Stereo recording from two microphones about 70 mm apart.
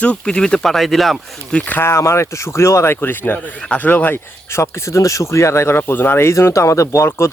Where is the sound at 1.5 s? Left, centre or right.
Left.